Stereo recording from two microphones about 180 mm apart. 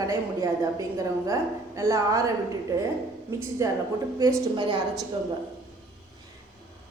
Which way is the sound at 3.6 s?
15° right (ahead or behind).